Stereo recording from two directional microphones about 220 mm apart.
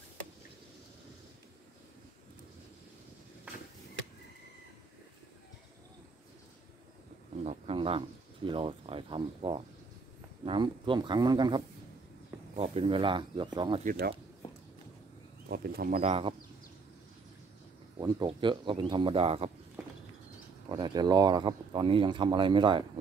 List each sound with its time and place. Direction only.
7.4 s a sound: 25° right (ahead or behind)
8.5 s speech: 25° right (ahead or behind)
13.8 s speech: 45° right (ahead or behind)
15.4 s speech: 40° right (ahead or behind)
16.0 s speech: 25° right (ahead or behind)
17.9 s speech: 20° right (ahead or behind)
20.6 s speech: 20° right (ahead or behind)